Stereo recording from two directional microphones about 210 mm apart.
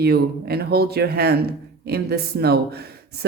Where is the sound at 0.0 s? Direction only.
50° right (ahead or behind).